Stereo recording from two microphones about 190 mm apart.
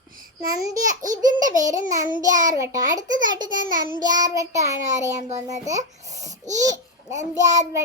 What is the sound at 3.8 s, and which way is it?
Child singing, 20° right (ahead or behind).